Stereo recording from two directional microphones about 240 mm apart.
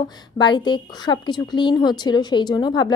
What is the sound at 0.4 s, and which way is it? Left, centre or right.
A woman's voice, centre.